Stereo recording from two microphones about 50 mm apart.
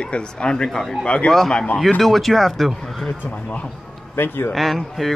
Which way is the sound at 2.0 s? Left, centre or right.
Centre.